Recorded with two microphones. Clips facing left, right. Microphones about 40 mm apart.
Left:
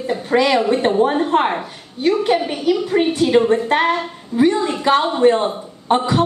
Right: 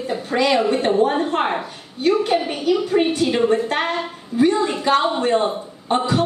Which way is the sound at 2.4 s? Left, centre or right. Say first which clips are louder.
Left 1 dB; centre.